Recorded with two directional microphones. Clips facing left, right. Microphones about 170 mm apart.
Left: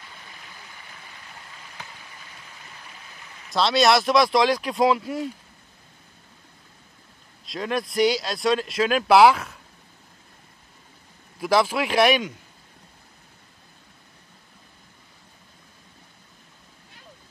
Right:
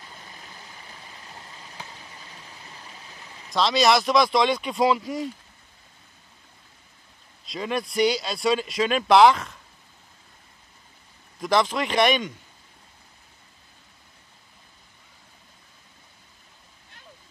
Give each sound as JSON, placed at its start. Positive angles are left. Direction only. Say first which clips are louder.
{"t": 0.1, "sound": "vehicle", "louder": "right 1 dB", "side_deg": -35}
{"t": 2.8, "sound": "stream", "louder": "right 1 dB", "side_deg": -20}
{"t": 3.4, "sound": "speech", "louder": "left 1 dB", "side_deg": 0}
{"t": 7.4, "sound": "speech", "louder": "left 1 dB", "side_deg": 0}
{"t": 11.3, "sound": "a man's voice", "louder": "left 1 dB", "side_deg": 5}